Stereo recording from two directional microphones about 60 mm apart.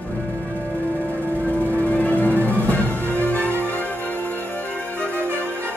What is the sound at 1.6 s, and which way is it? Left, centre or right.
Music, left.